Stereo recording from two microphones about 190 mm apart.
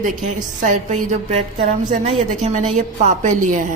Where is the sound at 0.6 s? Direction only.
40° right (ahead or behind).